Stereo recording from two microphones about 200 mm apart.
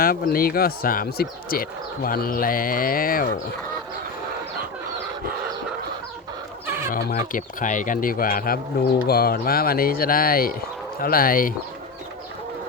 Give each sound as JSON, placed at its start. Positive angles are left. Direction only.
{"t": 0.0, "sound": "speech", "side_deg": 45}
{"t": 6.9, "sound": "speech", "side_deg": 45}